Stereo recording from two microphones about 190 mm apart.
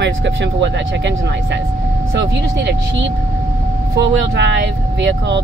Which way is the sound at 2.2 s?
70° right (ahead or behind).